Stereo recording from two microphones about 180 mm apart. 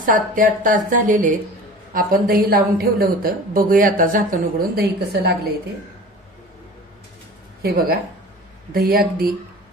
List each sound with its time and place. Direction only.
0.0 s a woman's voice: 50° right (ahead or behind)
8.7 s speech: 55° right (ahead or behind)